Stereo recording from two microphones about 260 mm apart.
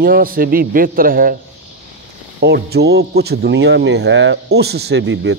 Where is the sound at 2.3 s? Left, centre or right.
Right.